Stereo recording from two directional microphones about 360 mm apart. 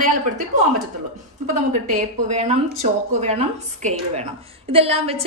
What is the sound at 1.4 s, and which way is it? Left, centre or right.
A woman's voice, centre.